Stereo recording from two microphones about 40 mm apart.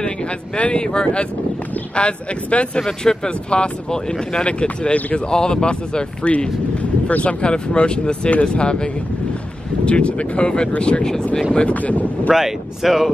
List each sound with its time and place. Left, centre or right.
0.6 s speech: left
2.8 s speech: centre
3.4 s speech: left
7.4 s speech: left
9.8 s speech: left
11.7 s speech: left
12.4 s speech: centre